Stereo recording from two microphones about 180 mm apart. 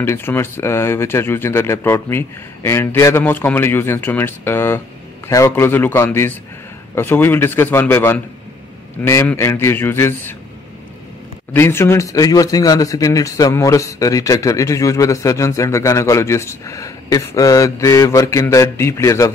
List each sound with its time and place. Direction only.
0.0 s speech: 15° left (ahead or behind)
11.5 s speech: 15° left (ahead or behind)